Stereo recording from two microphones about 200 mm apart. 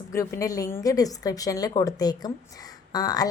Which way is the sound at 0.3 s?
15° left (ahead or behind).